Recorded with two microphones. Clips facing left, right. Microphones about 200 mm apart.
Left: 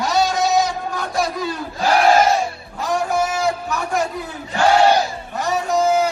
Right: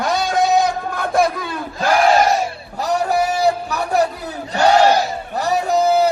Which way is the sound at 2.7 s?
35° right (ahead or behind).